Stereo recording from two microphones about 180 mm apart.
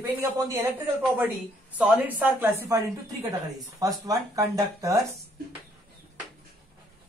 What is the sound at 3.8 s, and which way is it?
Speech, 20° right (ahead or behind).